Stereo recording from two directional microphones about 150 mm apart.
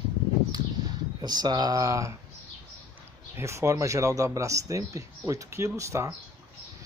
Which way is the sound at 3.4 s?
20° right (ahead or behind).